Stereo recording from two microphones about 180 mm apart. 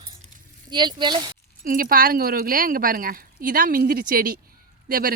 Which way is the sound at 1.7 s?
50° right (ahead or behind).